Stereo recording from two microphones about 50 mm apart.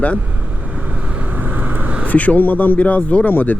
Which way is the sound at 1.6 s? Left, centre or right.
Right.